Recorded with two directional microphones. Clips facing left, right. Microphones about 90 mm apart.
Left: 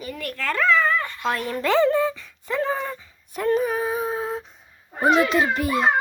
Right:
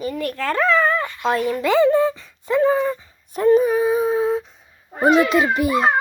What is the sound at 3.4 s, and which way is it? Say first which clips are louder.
Humming: right 7 dB; 10° right (ahead or behind).